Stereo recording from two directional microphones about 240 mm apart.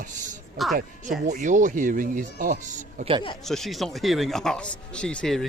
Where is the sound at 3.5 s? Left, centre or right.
Centre.